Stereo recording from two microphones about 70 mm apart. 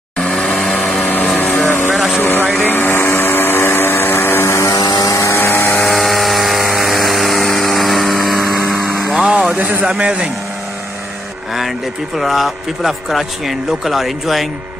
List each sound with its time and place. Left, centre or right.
0.2 s vehicle: centre
1.9 s vehicle: centre
2.1 s vehicle: left
4.7 s vehicle: left
5.1 s vehicle: left
5.4 s vehicle: left
5.7 s vehicle: centre
9.0 s music: centre
9.3 s a sound: centre
9.8 s speech: centre
12.2 s speech: centre